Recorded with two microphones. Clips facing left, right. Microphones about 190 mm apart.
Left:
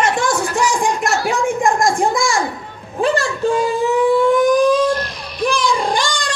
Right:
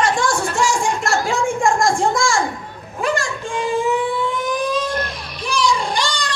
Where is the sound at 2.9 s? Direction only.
35° left (ahead or behind).